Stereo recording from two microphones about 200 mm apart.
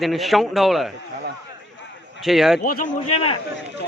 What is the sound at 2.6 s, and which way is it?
Speech, 40° left (ahead or behind).